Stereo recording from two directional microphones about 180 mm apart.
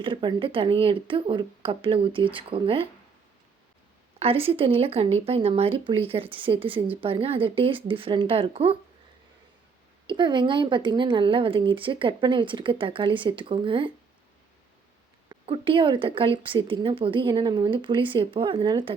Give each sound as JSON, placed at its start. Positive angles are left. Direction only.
{"t": 0.0, "sound": "speech", "side_deg": -25}
{"t": 4.2, "sound": "speech", "side_deg": -30}
{"t": 10.1, "sound": "speech", "side_deg": -25}
{"t": 15.3, "sound": "speech", "side_deg": -30}